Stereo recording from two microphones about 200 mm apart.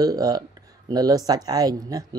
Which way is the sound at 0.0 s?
20° right (ahead or behind).